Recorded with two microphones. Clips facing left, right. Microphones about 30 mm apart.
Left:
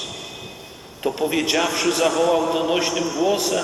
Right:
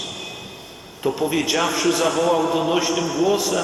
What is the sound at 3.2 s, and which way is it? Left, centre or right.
Speech, left.